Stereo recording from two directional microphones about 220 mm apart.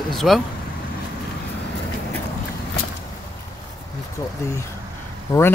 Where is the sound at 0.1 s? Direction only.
Centre (ahead or behind).